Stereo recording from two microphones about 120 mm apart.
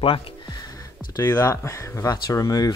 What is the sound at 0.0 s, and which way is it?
Music, 50° left (ahead or behind).